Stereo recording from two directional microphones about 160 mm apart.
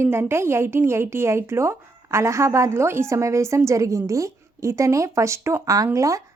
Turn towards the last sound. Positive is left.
turn(degrees=-20)  # may be behind; listen again after turning